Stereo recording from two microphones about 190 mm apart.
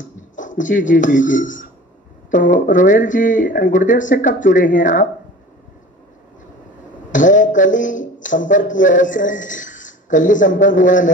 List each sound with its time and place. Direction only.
0.4 s speech: 45° left (ahead or behind)
7.1 s speech: 40° left (ahead or behind)